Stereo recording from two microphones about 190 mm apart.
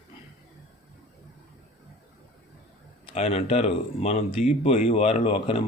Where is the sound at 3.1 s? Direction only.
30° left (ahead or behind).